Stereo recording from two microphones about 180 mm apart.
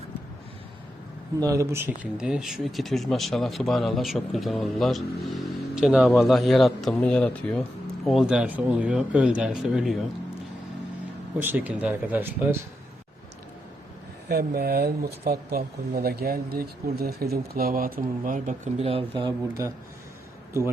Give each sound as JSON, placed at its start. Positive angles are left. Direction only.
{"t": 1.4, "sound": "speech", "side_deg": -20}
{"t": 11.3, "sound": "speech", "side_deg": -10}
{"t": 14.3, "sound": "speech", "side_deg": -60}